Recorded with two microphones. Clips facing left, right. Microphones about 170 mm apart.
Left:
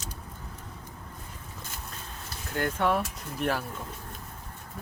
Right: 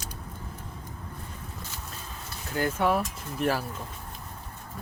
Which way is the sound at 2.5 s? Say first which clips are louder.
Right 1 dB; 5° right (ahead or behind).